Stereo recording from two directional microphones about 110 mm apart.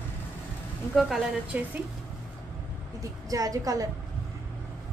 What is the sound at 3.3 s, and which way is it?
Speech, 30° right (ahead or behind).